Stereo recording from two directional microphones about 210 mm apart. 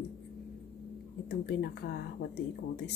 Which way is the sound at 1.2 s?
50° left (ahead or behind).